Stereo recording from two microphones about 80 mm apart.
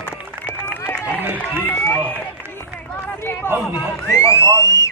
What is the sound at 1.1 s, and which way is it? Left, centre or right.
Run, right.